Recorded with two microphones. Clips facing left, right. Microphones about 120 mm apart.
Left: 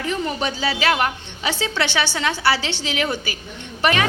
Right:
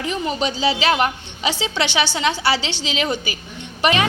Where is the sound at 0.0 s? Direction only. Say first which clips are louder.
Right 1 dB; 20° right (ahead or behind).